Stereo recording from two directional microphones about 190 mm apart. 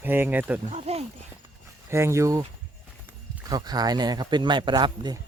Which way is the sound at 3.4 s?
20° right (ahead or behind).